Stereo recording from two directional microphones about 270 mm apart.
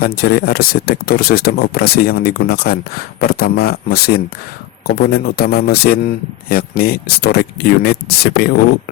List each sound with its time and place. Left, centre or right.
0.0 s speech: left